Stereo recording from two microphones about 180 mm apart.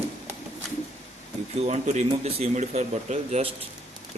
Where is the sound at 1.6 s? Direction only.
40° right (ahead or behind).